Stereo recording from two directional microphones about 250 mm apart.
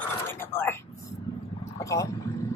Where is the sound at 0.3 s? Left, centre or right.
Centre.